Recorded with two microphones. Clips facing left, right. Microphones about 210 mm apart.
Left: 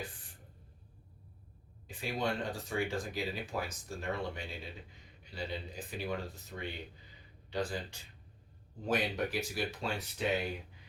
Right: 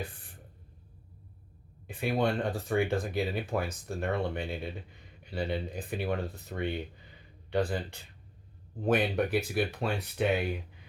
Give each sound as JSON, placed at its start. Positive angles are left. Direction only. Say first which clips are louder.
{"t": 1.9, "sound": "speech", "louder": "right 7 dB", "side_deg": -60}